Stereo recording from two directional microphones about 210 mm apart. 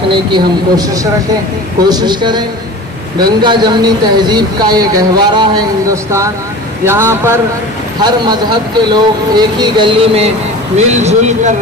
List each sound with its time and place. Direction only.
0.1 s speech: 20° right (ahead or behind)
3.4 s speech: 20° right (ahead or behind)